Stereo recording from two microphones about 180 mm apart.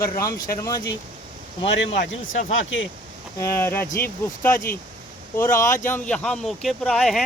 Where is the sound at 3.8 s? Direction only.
50° left (ahead or behind).